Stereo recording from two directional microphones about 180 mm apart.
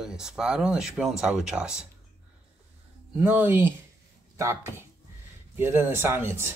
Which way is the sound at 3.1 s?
10° right (ahead or behind).